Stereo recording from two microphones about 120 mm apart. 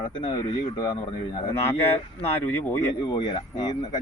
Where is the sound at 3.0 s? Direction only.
40° left (ahead or behind).